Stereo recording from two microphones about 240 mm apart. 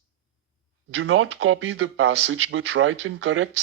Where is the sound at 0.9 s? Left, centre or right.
Right.